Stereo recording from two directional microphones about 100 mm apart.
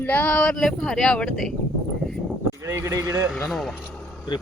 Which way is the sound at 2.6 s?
25° right (ahead or behind).